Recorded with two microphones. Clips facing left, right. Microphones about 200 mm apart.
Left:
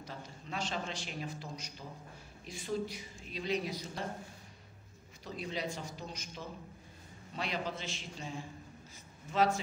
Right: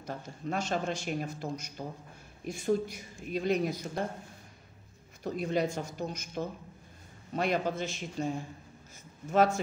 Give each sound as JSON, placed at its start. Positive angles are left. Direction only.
{"t": 0.0, "sound": "a man's voice", "side_deg": -50}
{"t": 5.2, "sound": "a man's voice", "side_deg": -50}